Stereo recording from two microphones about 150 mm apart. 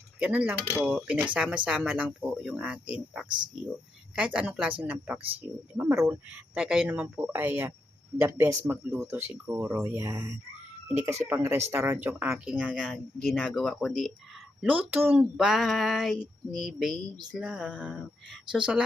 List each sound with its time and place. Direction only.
0.2 s speech: 10° right (ahead or behind)
6.5 s speech: 5° right (ahead or behind)
13.3 s speech: 5° left (ahead or behind)